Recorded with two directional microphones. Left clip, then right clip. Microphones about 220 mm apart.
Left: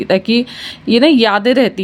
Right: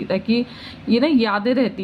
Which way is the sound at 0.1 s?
50° left (ahead or behind).